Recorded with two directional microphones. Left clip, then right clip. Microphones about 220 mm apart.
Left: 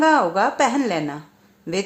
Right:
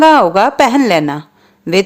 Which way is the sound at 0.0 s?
40° right (ahead or behind).